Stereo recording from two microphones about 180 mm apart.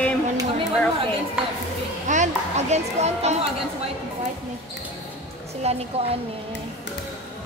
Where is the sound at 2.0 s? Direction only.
40° right (ahead or behind).